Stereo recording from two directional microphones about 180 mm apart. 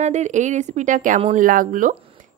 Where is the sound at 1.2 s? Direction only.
35° right (ahead or behind).